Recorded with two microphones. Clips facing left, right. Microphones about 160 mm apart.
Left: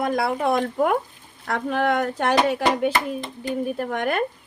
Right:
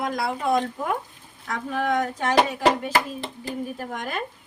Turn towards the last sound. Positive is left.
turn(degrees=65)  # may be behind; listen again after turning